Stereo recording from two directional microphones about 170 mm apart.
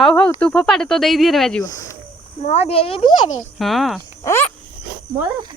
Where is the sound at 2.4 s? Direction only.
35° left (ahead or behind).